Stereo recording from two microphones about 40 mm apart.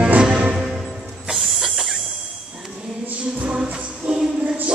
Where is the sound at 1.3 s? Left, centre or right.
Centre.